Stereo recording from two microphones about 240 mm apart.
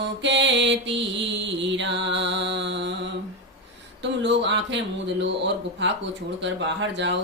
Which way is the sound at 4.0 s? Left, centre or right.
Right.